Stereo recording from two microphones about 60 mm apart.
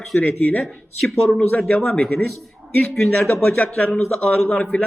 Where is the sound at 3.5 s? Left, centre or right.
Centre.